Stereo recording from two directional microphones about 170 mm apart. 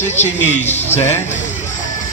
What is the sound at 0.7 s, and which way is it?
Speech, 40° left (ahead or behind).